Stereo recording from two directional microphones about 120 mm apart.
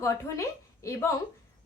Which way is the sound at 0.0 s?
25° left (ahead or behind).